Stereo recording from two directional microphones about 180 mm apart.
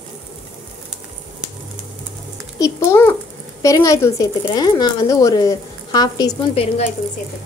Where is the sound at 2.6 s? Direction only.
15° left (ahead or behind).